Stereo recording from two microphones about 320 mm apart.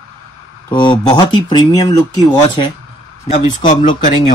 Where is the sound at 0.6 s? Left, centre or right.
Centre.